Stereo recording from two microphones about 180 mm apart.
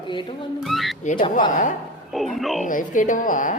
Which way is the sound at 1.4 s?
45° left (ahead or behind).